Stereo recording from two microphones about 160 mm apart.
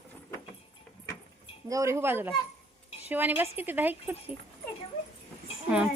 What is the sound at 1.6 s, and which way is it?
Speech, 20° right (ahead or behind).